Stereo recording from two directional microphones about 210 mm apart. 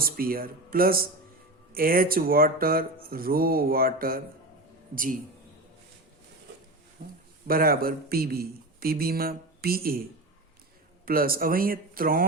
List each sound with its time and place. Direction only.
0.0 s speech: 45° right (ahead or behind)
7.4 s speech: 45° right (ahead or behind)
11.0 s speech: 45° right (ahead or behind)